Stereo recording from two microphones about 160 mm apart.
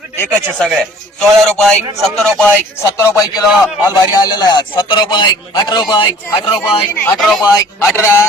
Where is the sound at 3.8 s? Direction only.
25° left (ahead or behind).